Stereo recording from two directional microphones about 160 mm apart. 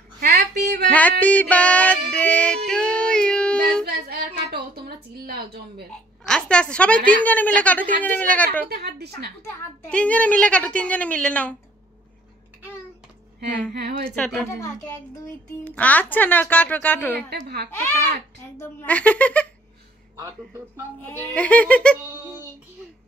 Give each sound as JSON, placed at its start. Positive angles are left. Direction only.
{"t": 0.2, "sound": "music", "side_deg": -90}
{"t": 0.8, "sound": "music", "side_deg": 10}
{"t": 3.8, "sound": "female singing", "side_deg": -70}
{"t": 4.8, "sound": "a sound", "side_deg": -75}
{"t": 6.2, "sound": "a woman's voice", "side_deg": 5}
{"t": 8.6, "sound": "speech", "side_deg": -90}
{"t": 9.4, "sound": "a woman's voice", "side_deg": 10}
{"t": 13.7, "sound": "speech", "side_deg": -90}
{"t": 14.0, "sound": "a woman's voice", "side_deg": 5}
{"t": 15.6, "sound": "a woman's voice", "side_deg": 10}
{"t": 18.6, "sound": "a woman's voice", "side_deg": 10}
{"t": 20.2, "sound": "a man's voice", "side_deg": -20}
{"t": 21.1, "sound": "a woman's voice", "side_deg": 10}
{"t": 22.1, "sound": "child singing", "side_deg": -15}